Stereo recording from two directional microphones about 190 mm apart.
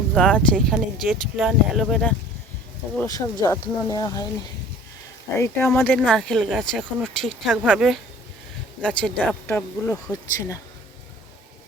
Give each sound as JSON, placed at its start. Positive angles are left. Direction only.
{"t": 0.1, "sound": "speech", "side_deg": 5}
{"t": 3.1, "sound": "speech", "side_deg": 20}
{"t": 5.4, "sound": "speech", "side_deg": 10}
{"t": 6.6, "sound": "speech", "side_deg": -10}
{"t": 9.0, "sound": "speech", "side_deg": 5}